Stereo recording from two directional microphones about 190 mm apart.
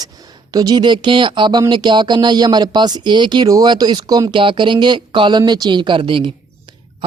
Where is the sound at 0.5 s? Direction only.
20° right (ahead or behind).